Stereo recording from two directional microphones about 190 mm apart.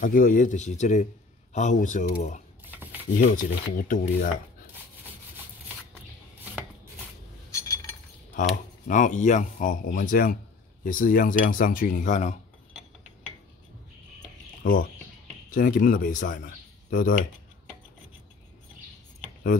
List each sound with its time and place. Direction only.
0.0 s speech: 45° left (ahead or behind)
2.7 s a sound: 10° right (ahead or behind)
3.2 s speech: 50° left (ahead or behind)
8.4 s speech: 45° left (ahead or behind)
14.6 s speech: 45° left (ahead or behind)